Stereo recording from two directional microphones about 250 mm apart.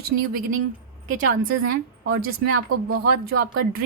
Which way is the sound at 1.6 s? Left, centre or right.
Right.